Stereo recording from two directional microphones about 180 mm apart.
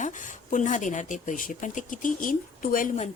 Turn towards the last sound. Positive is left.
turn(degrees=45)  # may be behind; listen again after turning